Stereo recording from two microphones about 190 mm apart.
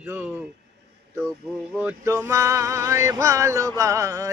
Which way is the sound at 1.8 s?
15° right (ahead or behind).